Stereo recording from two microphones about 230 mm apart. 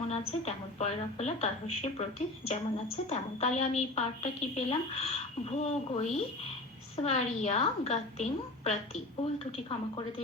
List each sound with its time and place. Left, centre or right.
0.1 s a woman's voice: left